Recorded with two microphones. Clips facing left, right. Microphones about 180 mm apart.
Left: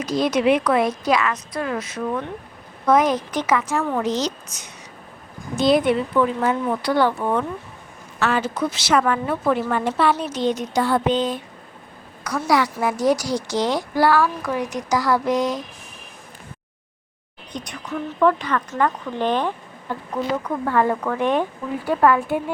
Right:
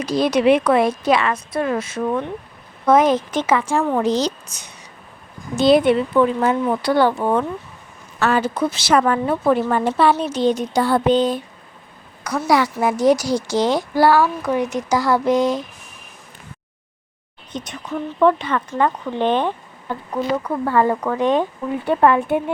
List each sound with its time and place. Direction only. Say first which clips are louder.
0.0 s a woman's voice: right 3 dB; 35° right (ahead or behind)
17.5 s a woman's voice: right 2 dB; 25° right (ahead or behind)
20.5 s speech: right 2 dB; 10° right (ahead or behind)
21.8 s a woman's voice: right 2 dB; 25° right (ahead or behind)